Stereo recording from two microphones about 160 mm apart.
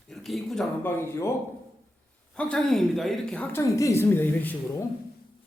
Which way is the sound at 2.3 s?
5° left (ahead or behind).